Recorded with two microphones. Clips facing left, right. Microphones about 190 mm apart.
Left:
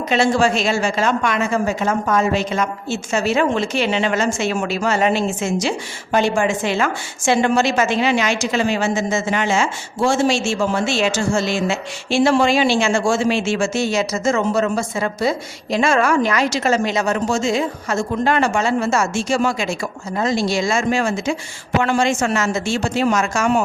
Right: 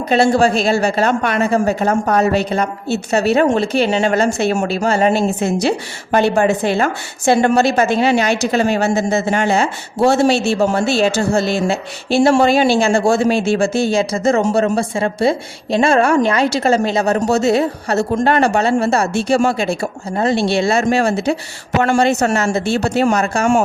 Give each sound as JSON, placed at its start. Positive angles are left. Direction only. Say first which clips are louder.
{"t": 0.1, "sound": "a woman's voice", "louder": "right 4 dB", "side_deg": -35}
{"t": 5.5, "sound": "a woman's voice", "louder": "right 4 dB", "side_deg": -55}
{"t": 10.0, "sound": "speech", "louder": "right 4 dB", "side_deg": -65}
{"t": 10.6, "sound": "a woman's voice", "louder": "right 4 dB", "side_deg": -35}
{"t": 12.3, "sound": "a woman's voice", "louder": "right 4 dB", "side_deg": -45}
{"t": 19.1, "sound": "speech", "louder": "right 4 dB", "side_deg": -60}
{"t": 19.5, "sound": "a woman's voice", "louder": "right 4 dB", "side_deg": -30}
{"t": 20.3, "sound": "speech", "louder": "right 3 dB", "side_deg": -60}
{"t": 20.6, "sound": "a woman's voice", "louder": "right 4 dB", "side_deg": -35}
{"t": 21.1, "sound": "speech", "louder": "right 4 dB", "side_deg": -65}
{"t": 21.8, "sound": "a woman's voice", "louder": "right 4 dB", "side_deg": -40}
{"t": 22.7, "sound": "speech", "louder": "right 4 dB", "side_deg": -60}
{"t": 23.1, "sound": "a woman's voice", "louder": "right 3 dB", "side_deg": -35}